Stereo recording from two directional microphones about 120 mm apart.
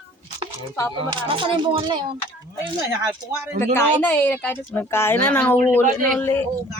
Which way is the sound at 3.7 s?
15° left (ahead or behind).